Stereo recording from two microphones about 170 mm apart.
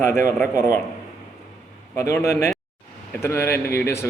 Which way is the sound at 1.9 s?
15° left (ahead or behind).